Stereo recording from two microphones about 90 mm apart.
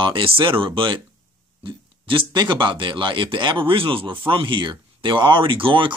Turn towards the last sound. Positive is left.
turn(degrees=-70)  # may be behind; listen again after turning